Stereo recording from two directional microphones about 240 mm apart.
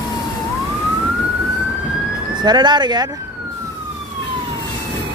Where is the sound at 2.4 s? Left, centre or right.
Centre.